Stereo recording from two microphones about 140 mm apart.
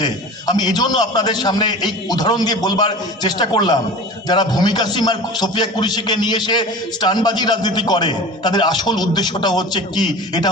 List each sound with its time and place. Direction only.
0.0 s a man's voice: 30° left (ahead or behind)